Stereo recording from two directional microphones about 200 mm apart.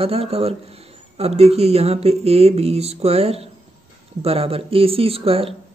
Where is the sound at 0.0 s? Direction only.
30° right (ahead or behind).